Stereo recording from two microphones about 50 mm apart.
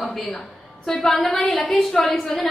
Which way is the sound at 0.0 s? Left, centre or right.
Centre.